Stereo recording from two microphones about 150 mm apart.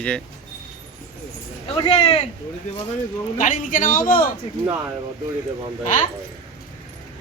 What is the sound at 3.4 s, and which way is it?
Speech, 60° left (ahead or behind).